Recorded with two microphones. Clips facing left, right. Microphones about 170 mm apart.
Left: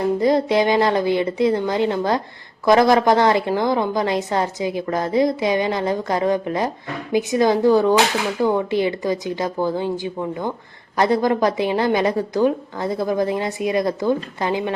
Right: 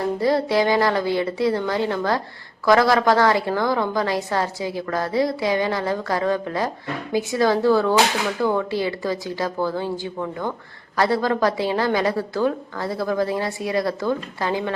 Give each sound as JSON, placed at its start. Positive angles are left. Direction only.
{"t": 0.0, "sound": "a woman's voice", "side_deg": 20}